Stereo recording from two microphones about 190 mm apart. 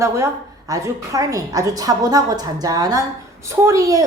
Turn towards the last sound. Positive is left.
turn(degrees=-15)  # may be behind; listen again after turning